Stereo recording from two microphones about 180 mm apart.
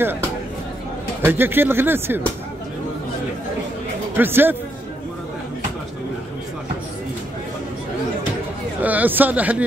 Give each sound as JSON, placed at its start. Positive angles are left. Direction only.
{"t": 1.2, "sound": "speech", "side_deg": -10}
{"t": 4.2, "sound": "speech", "side_deg": -10}
{"t": 8.8, "sound": "speech", "side_deg": -10}